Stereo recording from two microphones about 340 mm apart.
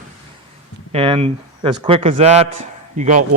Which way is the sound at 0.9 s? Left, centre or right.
Centre.